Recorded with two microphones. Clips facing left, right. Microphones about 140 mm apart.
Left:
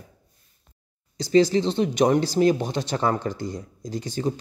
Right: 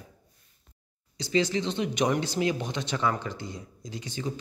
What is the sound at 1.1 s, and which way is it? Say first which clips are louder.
Speech: left 8 dB; 40° left (ahead or behind).